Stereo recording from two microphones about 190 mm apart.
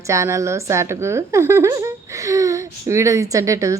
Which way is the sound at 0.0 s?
15° right (ahead or behind).